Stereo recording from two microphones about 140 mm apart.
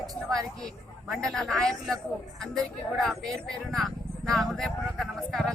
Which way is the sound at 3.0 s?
Centre (ahead or behind).